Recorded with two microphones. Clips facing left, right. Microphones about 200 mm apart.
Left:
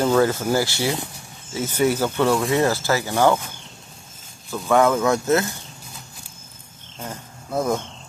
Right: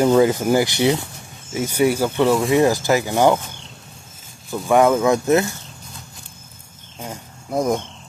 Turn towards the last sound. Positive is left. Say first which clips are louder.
# right 2 dB
turn(degrees=-15)  # may be behind; listen again after turning